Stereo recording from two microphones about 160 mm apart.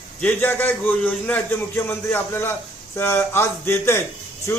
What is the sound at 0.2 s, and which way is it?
A man's voice, 10° left (ahead or behind).